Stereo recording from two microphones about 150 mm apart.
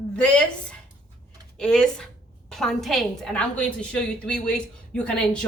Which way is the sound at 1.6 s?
5° left (ahead or behind).